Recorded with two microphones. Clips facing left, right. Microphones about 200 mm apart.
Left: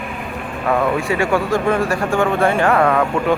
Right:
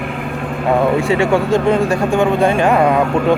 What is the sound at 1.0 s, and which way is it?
Speech, 25° right (ahead or behind).